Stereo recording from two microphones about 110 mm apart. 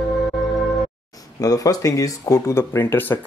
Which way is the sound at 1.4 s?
30° left (ahead or behind).